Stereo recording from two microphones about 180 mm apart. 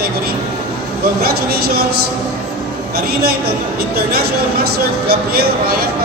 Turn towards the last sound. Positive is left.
turn(degrees=-60)  # may be behind; listen again after turning